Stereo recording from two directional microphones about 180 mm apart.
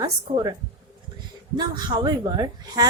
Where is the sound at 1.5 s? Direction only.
25° right (ahead or behind).